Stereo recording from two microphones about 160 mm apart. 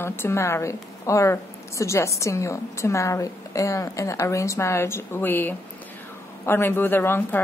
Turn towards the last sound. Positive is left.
turn(degrees=15)  # may be behind; listen again after turning